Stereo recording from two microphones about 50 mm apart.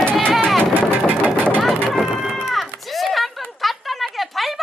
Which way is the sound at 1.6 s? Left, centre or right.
Centre.